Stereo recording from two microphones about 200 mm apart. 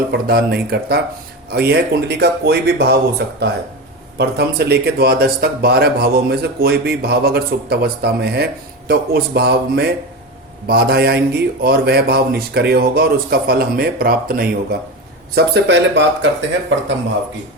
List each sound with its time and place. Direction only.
0.1 s speech: 50° right (ahead or behind)